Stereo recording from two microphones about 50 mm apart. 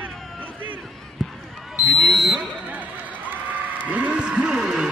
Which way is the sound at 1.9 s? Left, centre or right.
Centre.